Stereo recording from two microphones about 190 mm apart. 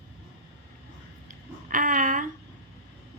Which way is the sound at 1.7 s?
45° right (ahead or behind).